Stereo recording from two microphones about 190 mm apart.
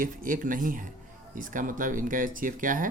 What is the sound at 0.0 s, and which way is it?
Speech, 45° right (ahead or behind).